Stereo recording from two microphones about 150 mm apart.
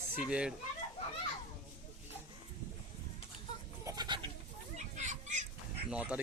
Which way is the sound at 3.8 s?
25° right (ahead or behind).